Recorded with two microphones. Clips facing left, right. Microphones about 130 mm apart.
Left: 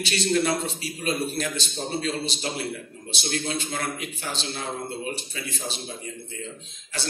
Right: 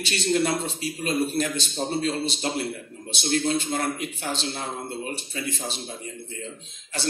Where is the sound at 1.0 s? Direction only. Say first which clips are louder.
Right 2 dB; 40° right (ahead or behind).